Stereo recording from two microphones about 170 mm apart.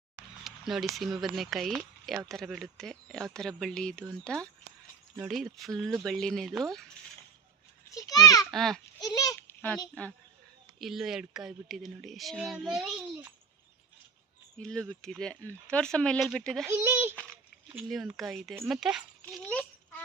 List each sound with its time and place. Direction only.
0.4 s speech: centre (ahead or behind)
7.9 s a child's voice: 20° left (ahead or behind)
8.4 s speech: centre (ahead or behind)
9.0 s a sound: 20° left (ahead or behind)
10.8 s speech: centre (ahead or behind)
14.6 s speech: 5° left (ahead or behind)
16.6 s a child's voice: 10° right (ahead or behind)
17.8 s speech: centre (ahead or behind)
19.2 s a sound: 5° left (ahead or behind)